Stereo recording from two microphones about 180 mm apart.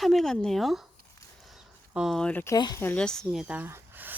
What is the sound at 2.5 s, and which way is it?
A woman's voice, 20° left (ahead or behind).